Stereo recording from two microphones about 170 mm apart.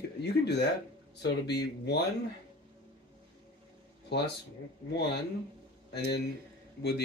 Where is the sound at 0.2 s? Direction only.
75° left (ahead or behind).